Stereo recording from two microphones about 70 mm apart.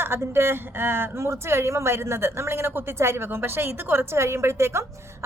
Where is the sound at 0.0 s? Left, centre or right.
Right.